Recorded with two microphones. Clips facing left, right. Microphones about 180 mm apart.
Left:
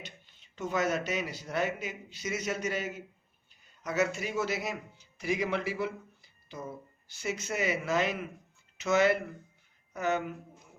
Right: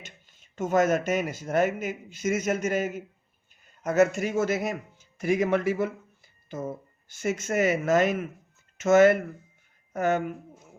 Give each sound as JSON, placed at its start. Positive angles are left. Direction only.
{"t": 0.0, "sound": "a man's voice", "side_deg": -45}